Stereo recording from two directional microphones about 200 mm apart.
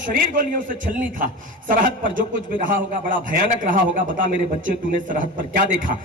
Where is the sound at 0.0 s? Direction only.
45° right (ahead or behind).